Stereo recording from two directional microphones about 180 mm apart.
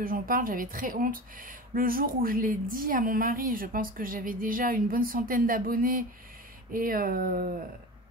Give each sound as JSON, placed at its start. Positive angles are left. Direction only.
{"t": 0.0, "sound": "speech", "side_deg": -50}